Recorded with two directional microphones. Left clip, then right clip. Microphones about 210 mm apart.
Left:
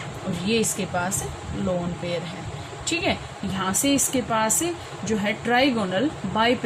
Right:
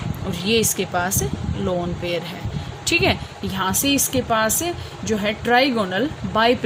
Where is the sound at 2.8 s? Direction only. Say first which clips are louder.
Right 6 dB; 50° right (ahead or behind).